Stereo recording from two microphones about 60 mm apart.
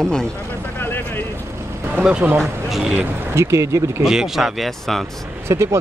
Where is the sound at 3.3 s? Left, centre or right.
Right.